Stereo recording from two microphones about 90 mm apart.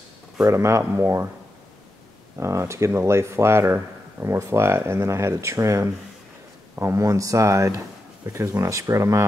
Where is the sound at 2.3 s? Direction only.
30° right (ahead or behind).